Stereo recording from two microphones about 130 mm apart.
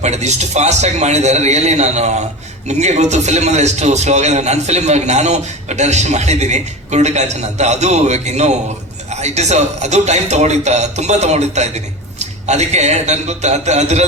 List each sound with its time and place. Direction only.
0.0 s a man's voice: 60° right (ahead or behind)